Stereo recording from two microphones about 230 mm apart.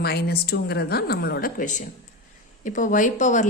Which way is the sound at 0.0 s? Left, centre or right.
Left.